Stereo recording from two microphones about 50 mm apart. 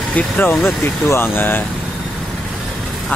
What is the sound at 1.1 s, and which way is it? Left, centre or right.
Speech, left.